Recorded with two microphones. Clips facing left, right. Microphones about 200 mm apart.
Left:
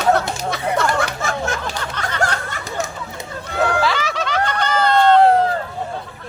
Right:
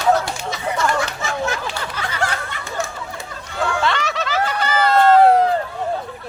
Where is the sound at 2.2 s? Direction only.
45° left (ahead or behind).